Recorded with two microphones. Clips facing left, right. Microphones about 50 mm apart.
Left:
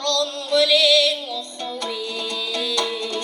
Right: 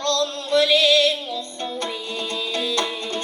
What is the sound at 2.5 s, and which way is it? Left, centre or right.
Music, right.